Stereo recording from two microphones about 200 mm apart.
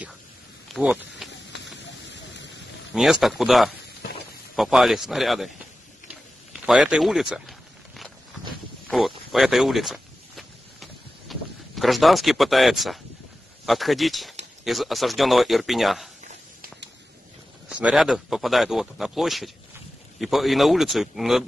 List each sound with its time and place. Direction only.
0.7 s a sound: centre (ahead or behind)
1.5 s rain: 60° left (ahead or behind)
2.9 s speech: centre (ahead or behind)
6.5 s a sound: centre (ahead or behind)
13.7 s speech: centre (ahead or behind)
17.6 s speech: 5° right (ahead or behind)